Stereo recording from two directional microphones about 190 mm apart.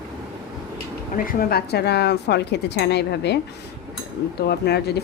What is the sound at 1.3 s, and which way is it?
A woman's voice, 50° left (ahead or behind).